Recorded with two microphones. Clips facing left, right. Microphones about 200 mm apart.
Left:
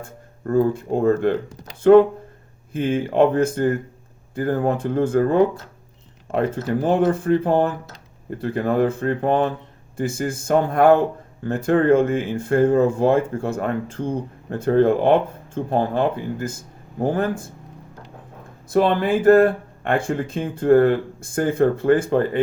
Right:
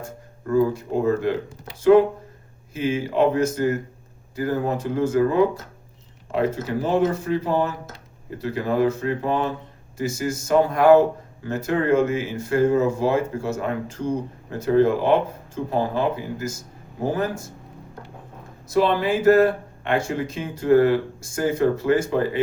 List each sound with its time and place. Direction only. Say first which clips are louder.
0.0 s speech: left 2 dB; 55° left (ahead or behind)
18.7 s speech: left 2 dB; 55° left (ahead or behind)